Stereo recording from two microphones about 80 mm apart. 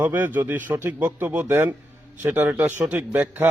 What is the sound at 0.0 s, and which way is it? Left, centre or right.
A man's voice, right.